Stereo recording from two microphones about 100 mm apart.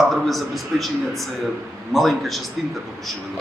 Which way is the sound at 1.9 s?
Centre (ahead or behind).